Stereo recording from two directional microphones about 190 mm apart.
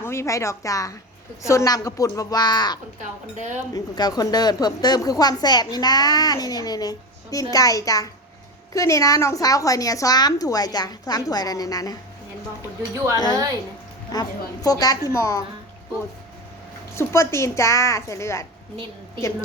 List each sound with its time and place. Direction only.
0.0 s a woman's voice: 15° left (ahead or behind)
3.0 s speech: 40° right (ahead or behind)
3.7 s a woman's voice: 20° left (ahead or behind)
13.1 s a woman's voice: 20° left (ahead or behind)
16.9 s speech: 15° left (ahead or behind)